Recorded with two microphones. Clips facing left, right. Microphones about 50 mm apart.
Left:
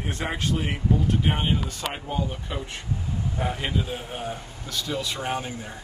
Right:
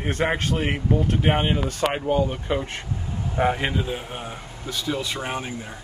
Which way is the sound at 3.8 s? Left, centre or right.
Right.